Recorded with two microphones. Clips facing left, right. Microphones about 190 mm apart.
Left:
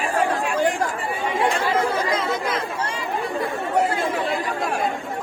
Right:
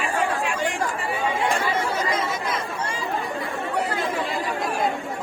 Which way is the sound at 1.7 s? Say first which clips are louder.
Left 4 dB; 55° left (ahead or behind).